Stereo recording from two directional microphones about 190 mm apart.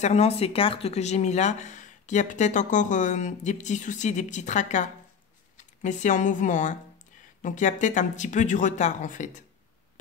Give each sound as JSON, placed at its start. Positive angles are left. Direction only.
{"t": 0.0, "sound": "speech", "side_deg": 35}